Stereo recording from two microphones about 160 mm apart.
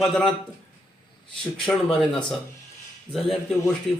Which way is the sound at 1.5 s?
5° left (ahead or behind).